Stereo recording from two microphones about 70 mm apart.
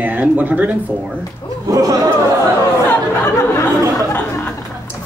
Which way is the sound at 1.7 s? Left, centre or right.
Right.